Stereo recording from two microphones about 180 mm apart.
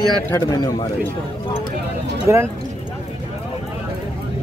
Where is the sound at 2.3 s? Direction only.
15° right (ahead or behind).